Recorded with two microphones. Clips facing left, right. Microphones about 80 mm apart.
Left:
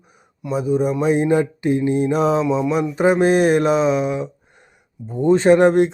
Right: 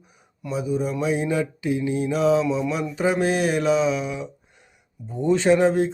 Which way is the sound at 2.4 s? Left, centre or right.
Left.